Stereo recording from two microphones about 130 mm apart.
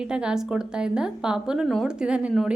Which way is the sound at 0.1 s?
5° right (ahead or behind).